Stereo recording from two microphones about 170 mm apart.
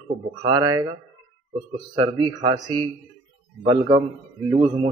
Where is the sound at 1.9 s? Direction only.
30° right (ahead or behind).